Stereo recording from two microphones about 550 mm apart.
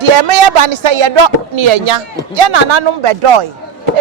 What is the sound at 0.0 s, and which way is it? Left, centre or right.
Speech, right.